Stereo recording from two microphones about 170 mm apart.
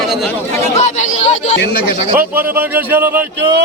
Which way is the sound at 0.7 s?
45° left (ahead or behind).